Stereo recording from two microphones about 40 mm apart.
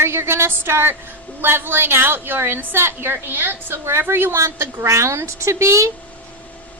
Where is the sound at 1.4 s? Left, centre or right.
Right.